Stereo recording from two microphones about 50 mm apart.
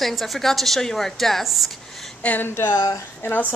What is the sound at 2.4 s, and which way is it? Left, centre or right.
Speech, left.